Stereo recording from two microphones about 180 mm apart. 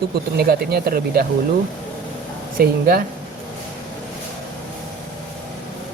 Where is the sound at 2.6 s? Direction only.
55° right (ahead or behind).